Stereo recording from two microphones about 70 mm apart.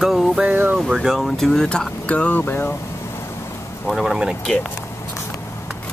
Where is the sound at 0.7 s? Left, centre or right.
Centre; by 2.4 s left.